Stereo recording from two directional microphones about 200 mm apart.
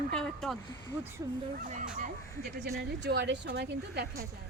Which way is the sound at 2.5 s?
55° right (ahead or behind).